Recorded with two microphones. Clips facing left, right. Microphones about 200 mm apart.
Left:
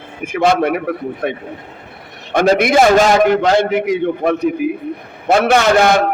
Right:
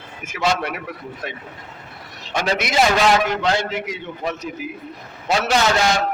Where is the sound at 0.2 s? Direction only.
55° left (ahead or behind).